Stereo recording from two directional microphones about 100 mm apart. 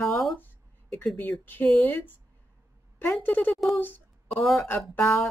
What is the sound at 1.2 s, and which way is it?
Speech, 20° left (ahead or behind).